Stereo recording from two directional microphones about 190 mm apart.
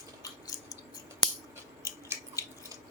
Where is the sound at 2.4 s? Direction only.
15° left (ahead or behind).